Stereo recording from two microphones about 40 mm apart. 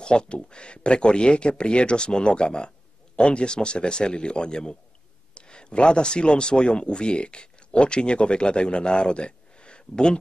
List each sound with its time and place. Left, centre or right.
0.0 s a man's voice: left